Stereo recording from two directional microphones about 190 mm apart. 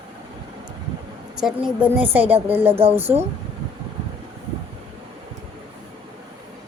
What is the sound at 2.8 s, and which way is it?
Speech, 30° right (ahead or behind).